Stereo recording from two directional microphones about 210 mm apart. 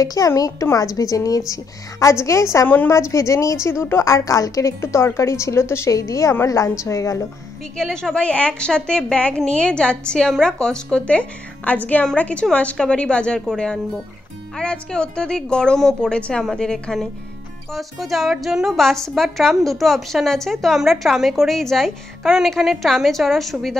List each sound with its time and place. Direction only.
0.0 s a woman's voice: 15° left (ahead or behind)
7.7 s a woman's voice: 5° left (ahead or behind)